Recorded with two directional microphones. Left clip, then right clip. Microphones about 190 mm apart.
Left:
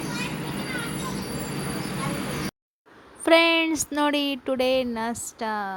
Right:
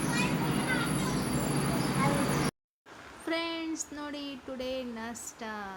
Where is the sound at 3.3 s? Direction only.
45° left (ahead or behind).